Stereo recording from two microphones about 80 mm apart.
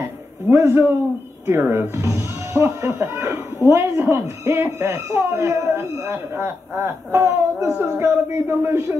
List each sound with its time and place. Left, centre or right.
0.5 s speech: right